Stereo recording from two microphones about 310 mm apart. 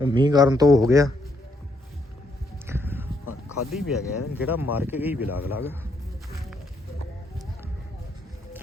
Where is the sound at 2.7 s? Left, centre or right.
Centre.